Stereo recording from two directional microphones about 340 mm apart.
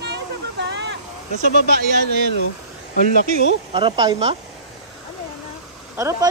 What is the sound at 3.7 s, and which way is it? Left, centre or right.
Speech, centre.